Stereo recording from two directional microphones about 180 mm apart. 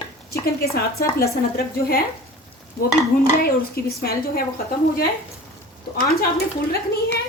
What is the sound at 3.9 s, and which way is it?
Speech, 55° left (ahead or behind).